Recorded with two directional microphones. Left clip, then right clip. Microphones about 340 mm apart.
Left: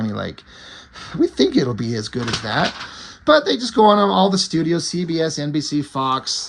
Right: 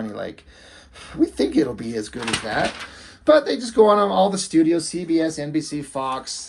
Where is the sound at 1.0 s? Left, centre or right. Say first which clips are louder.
Left 3 dB; left.